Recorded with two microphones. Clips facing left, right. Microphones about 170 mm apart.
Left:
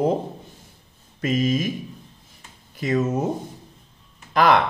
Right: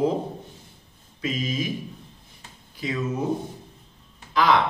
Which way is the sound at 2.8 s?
50° left (ahead or behind).